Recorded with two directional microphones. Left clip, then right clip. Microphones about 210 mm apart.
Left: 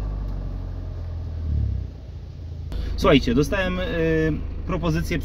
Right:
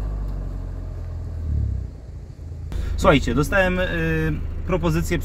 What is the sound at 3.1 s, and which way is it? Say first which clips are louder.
Speech: right 1 dB; 10° left (ahead or behind).